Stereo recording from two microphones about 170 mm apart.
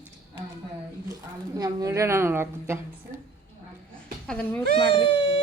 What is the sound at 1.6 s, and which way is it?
A woman's voice, 20° right (ahead or behind).